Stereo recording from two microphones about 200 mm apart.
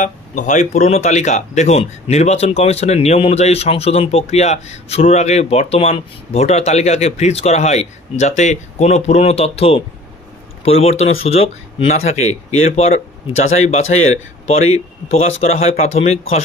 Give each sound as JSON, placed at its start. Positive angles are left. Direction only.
{"t": 0.0, "sound": "speech", "side_deg": 40}